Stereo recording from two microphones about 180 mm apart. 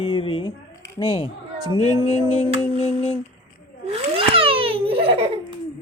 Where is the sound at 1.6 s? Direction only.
25° right (ahead or behind).